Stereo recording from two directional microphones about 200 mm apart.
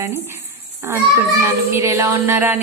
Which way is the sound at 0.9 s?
15° right (ahead or behind).